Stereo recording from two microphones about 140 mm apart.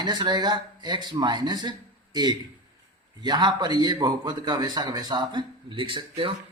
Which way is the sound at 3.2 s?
30° right (ahead or behind).